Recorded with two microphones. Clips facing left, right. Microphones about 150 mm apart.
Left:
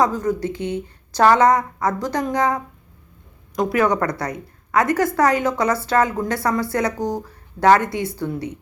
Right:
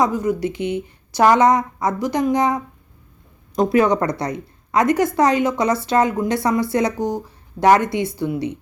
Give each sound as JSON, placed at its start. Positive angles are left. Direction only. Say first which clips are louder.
{"t": 0.0, "sound": "a woman's voice", "louder": "right 1 dB", "side_deg": -15}
{"t": 3.5, "sound": "a woman's voice", "louder": "right 3 dB", "side_deg": -30}